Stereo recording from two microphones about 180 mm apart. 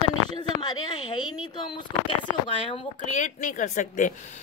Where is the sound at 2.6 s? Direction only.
45° left (ahead or behind).